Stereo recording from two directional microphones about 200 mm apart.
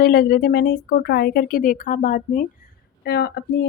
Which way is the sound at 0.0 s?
50° left (ahead or behind).